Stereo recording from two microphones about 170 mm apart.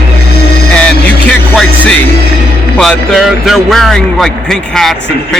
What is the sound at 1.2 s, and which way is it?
Speech, 5° left (ahead or behind).